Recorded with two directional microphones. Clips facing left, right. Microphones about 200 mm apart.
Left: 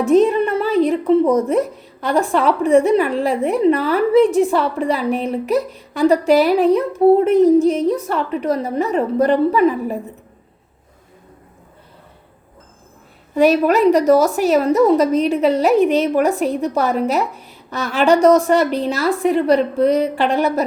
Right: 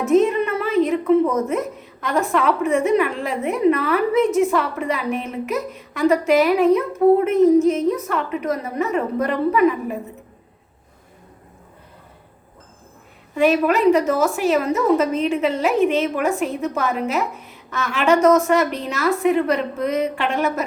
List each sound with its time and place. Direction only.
0.0 s speech: 35° left (ahead or behind)
13.3 s speech: 40° left (ahead or behind)